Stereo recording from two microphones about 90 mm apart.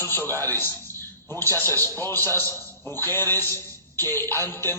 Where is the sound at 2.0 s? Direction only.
25° left (ahead or behind).